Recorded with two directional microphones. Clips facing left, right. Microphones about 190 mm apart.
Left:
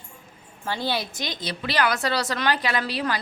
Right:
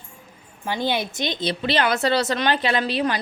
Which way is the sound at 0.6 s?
15° right (ahead or behind).